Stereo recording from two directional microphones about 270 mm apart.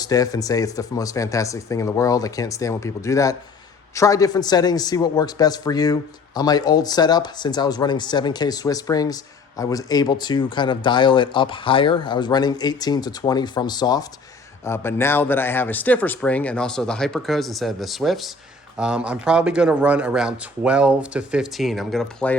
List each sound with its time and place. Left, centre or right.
0.0 s a man's voice: centre